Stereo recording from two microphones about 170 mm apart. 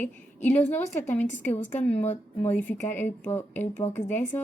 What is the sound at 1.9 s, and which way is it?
Speech, 40° left (ahead or behind).